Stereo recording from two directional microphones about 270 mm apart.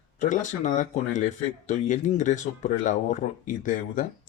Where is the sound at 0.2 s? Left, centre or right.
Left.